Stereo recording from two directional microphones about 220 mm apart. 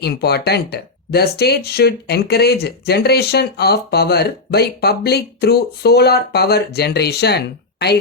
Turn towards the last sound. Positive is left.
turn(degrees=50)  # may be behind; listen again after turning